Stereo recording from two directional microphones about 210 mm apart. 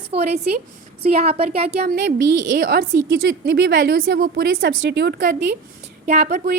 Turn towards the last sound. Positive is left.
turn(degrees=-40)  # may be behind; listen again after turning